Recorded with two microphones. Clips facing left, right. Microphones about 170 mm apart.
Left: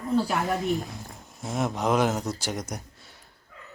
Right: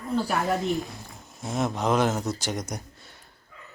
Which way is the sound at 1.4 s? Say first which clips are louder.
Even; 5° left (ahead or behind).